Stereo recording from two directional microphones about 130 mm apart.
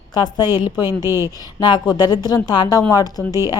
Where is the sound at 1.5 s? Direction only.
35° left (ahead or behind).